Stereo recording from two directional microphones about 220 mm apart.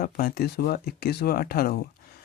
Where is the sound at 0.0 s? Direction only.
45° left (ahead or behind).